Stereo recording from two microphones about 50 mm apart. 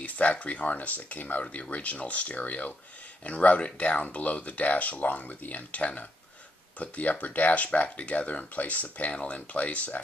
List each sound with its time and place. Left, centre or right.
0.0 s speech: left